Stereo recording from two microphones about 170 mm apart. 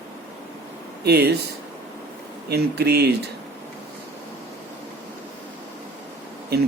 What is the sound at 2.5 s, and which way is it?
Speech, 70° right (ahead or behind).